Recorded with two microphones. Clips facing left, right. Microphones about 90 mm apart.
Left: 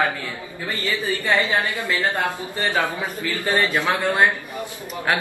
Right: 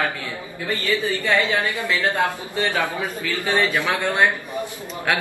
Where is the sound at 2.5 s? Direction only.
20° left (ahead or behind).